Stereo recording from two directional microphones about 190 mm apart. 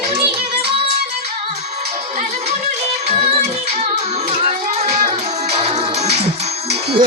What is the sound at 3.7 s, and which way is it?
Music, 35° right (ahead or behind).